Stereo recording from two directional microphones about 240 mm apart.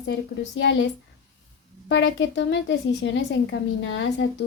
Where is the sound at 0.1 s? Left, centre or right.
Left.